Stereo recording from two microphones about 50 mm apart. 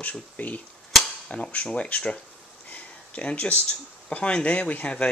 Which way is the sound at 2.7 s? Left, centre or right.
Left.